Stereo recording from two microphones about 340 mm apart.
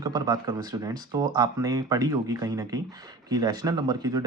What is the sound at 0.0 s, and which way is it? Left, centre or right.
Speech, centre.